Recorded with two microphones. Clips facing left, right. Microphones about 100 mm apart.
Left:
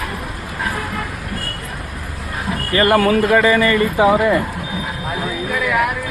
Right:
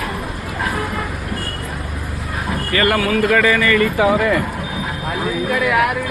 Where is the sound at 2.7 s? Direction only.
25° left (ahead or behind).